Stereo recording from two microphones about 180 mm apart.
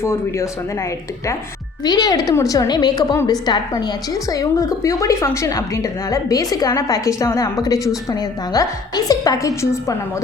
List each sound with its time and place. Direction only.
0.0 s speech: 15° left (ahead or behind)
1.8 s a woman's voice: 20° left (ahead or behind)